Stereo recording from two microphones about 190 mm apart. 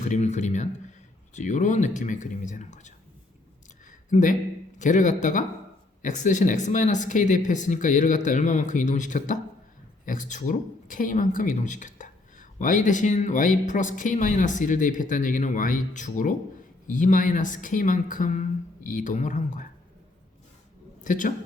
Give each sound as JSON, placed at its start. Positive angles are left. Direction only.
{"t": 0.0, "sound": "speech", "side_deg": 40}
{"t": 4.1, "sound": "speech", "side_deg": 40}
{"t": 21.0, "sound": "speech", "side_deg": 45}